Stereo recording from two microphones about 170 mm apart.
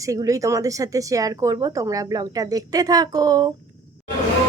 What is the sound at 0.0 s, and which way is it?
Speech, 20° right (ahead or behind).